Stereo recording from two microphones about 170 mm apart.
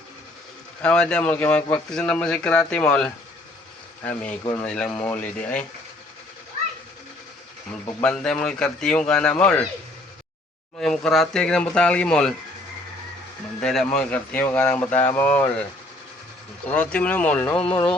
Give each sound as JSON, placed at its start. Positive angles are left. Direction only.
{"t": 0.8, "sound": "speech", "side_deg": 5}
{"t": 8.0, "sound": "speech", "side_deg": 5}
{"t": 10.8, "sound": "speech", "side_deg": 0}
{"t": 13.6, "sound": "speech", "side_deg": 5}
{"t": 16.7, "sound": "speech", "side_deg": 10}